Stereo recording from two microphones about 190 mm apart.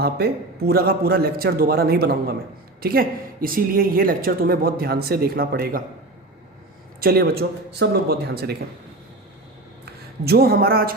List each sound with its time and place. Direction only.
0.0 s a woman's voice: 55° right (ahead or behind)
7.0 s speech: 55° right (ahead or behind)
9.8 s speech: 55° right (ahead or behind)